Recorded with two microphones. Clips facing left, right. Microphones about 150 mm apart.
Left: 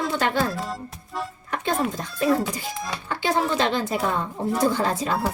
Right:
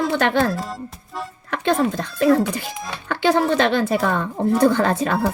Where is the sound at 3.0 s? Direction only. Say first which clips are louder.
Right 6 dB; 70° right (ahead or behind).